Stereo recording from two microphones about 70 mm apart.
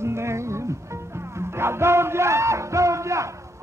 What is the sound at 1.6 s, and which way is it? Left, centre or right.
Music, right.